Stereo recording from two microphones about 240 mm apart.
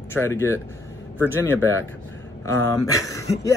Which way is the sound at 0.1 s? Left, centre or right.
Centre.